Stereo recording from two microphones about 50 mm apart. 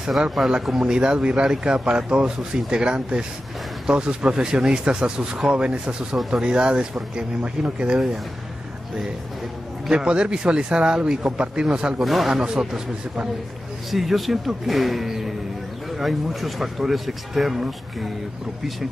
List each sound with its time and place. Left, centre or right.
0.5 s speech: centre
9.8 s speech: centre
12.0 s speech: centre
12.4 s speech: centre
13.8 s speech: centre